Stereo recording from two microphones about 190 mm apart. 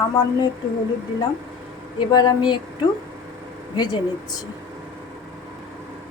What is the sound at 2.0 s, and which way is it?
Speech, 20° left (ahead or behind).